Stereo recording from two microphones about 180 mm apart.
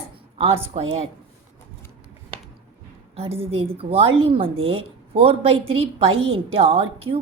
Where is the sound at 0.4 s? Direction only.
35° right (ahead or behind).